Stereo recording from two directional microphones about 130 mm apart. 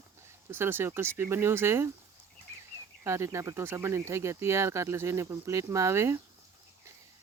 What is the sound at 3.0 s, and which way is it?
Speech, 20° right (ahead or behind).